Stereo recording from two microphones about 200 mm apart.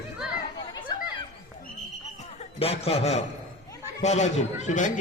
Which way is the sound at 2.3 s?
30° left (ahead or behind).